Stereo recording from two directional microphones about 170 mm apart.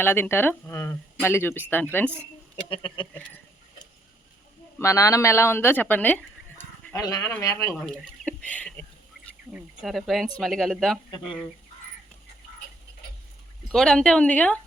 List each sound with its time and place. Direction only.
0.0 s speech: 15° left (ahead or behind)
2.6 s speech: 30° left (ahead or behind)
4.8 s speech: 20° left (ahead or behind)
7.8 s speech: 5° left (ahead or behind)
11.1 s speech: 25° left (ahead or behind)
13.7 s speech: 5° left (ahead or behind)